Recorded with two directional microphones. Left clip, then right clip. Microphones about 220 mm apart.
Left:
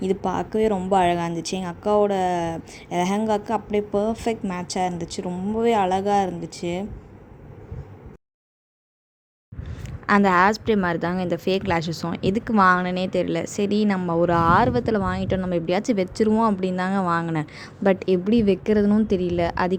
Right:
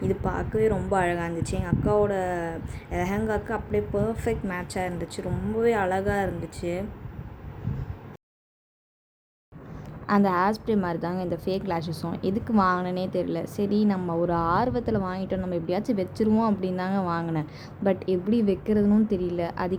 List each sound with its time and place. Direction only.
0.0 s a woman's voice: 30° left (ahead or behind)
10.1 s a woman's voice: 30° left (ahead or behind)